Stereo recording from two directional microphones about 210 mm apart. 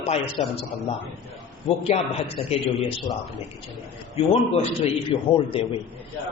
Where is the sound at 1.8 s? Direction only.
30° left (ahead or behind).